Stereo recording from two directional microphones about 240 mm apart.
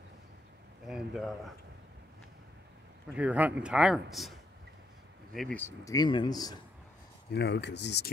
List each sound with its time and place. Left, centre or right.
0.8 s speech: centre
3.1 s a man's voice: centre
7.2 s speech: left